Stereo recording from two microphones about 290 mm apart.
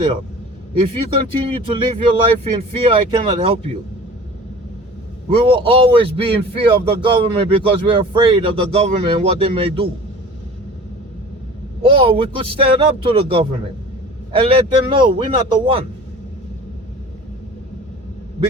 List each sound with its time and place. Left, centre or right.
0.7 s speech: centre
5.3 s speech: centre
11.8 s a man's voice: centre